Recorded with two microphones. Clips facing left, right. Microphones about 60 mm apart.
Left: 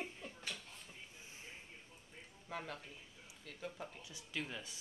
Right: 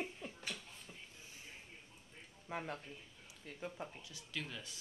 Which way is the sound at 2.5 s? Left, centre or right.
Centre.